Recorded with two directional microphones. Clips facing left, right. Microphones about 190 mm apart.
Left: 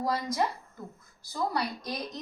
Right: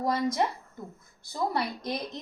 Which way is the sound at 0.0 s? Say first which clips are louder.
Right 2 dB; 20° right (ahead or behind).